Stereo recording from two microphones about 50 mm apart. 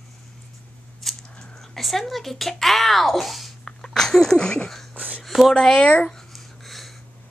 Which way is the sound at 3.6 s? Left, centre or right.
Centre.